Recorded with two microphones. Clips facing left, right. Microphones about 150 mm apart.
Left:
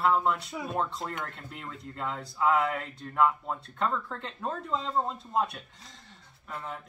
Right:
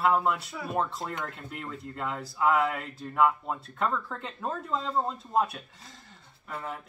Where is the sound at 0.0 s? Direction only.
5° right (ahead or behind).